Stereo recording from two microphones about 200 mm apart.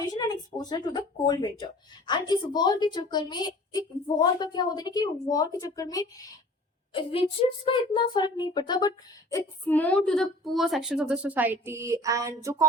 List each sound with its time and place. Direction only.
0.0 s a woman's voice: 20° left (ahead or behind)
6.9 s speech: 30° left (ahead or behind)
9.3 s a woman's voice: 10° left (ahead or behind); by 12.6 s 15° right (ahead or behind)